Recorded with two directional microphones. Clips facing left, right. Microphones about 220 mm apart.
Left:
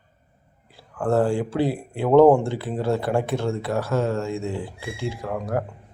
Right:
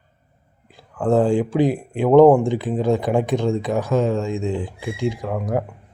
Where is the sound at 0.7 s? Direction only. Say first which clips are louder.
Right 3 dB; 15° right (ahead or behind).